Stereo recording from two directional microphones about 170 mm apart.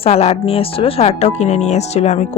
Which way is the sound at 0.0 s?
35° left (ahead or behind).